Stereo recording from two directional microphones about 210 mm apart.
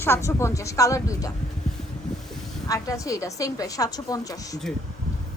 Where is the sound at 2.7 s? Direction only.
15° left (ahead or behind).